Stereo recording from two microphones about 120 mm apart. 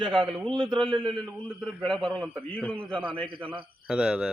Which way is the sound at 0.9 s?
45° right (ahead or behind).